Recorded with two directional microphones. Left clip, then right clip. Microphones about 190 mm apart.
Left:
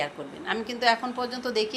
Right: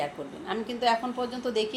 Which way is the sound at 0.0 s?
10° left (ahead or behind).